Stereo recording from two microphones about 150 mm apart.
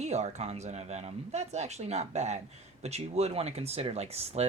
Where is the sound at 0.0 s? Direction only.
50° right (ahead or behind).